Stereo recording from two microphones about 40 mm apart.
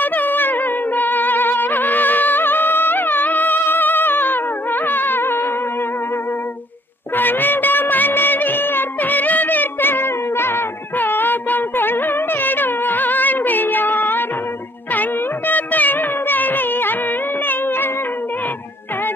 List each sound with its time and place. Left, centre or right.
0.0 s music: left
4.8 s a sound: left
7.2 s music: left